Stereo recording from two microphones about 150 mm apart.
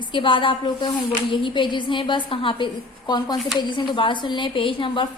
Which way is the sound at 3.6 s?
30° left (ahead or behind).